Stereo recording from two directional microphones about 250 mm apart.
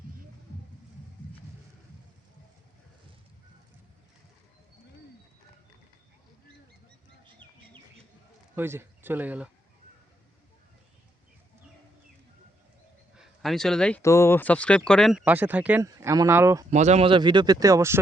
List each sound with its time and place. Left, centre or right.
8.5 s speech: centre
13.1 s speech: centre
16.7 s speech: right; by 18.0 s centre